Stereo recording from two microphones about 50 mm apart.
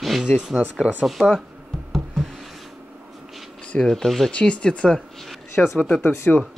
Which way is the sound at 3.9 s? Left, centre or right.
Centre.